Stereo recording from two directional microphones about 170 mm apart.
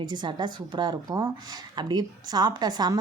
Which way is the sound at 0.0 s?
25° right (ahead or behind).